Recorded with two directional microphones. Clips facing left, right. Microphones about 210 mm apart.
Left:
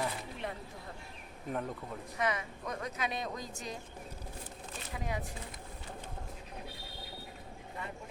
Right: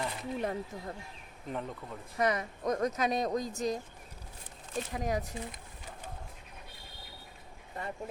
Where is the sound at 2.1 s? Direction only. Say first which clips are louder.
Right 5 dB; 40° right (ahead or behind).